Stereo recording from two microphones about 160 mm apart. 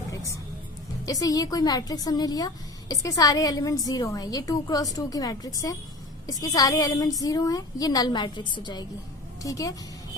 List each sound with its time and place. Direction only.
1.0 s a woman's voice: 20° left (ahead or behind)